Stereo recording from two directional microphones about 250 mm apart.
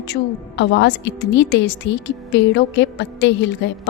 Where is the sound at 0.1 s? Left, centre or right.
Left.